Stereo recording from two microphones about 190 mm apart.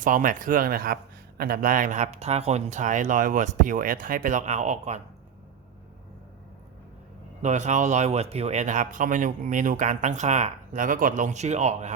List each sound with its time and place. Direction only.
0.0 s speech: 45° right (ahead or behind)
7.4 s speech: 40° right (ahead or behind)